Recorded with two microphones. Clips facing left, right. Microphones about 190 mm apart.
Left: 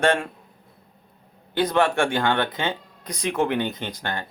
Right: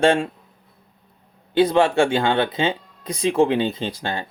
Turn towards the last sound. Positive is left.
turn(degrees=-25)  # may be behind; listen again after turning